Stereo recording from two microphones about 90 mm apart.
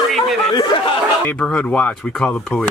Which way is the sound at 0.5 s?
55° left (ahead or behind).